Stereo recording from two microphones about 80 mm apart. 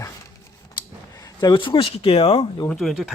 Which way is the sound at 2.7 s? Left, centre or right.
Centre.